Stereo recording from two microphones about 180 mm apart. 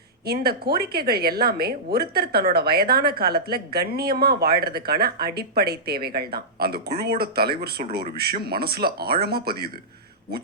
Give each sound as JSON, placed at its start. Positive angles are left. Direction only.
{"t": 0.3, "sound": "speech", "side_deg": -60}